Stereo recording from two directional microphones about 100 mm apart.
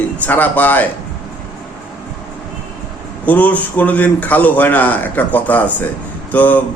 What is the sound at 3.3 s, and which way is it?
A man's voice, 15° left (ahead or behind).